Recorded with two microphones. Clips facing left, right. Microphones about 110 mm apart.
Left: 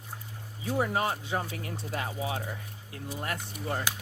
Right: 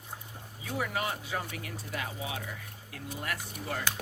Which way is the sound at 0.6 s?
30° left (ahead or behind).